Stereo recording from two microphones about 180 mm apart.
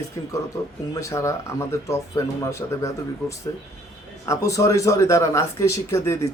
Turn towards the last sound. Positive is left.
turn(degrees=15)  # may be behind; listen again after turning